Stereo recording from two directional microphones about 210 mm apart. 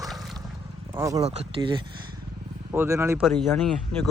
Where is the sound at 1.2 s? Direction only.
30° right (ahead or behind).